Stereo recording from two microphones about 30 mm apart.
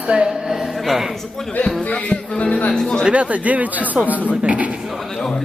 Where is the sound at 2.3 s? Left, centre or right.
Left.